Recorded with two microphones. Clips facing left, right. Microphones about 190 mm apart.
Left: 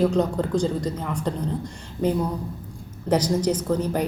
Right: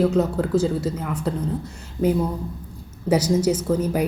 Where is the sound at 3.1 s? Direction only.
10° right (ahead or behind).